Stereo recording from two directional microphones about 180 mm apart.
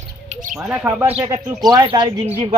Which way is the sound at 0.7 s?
10° right (ahead or behind).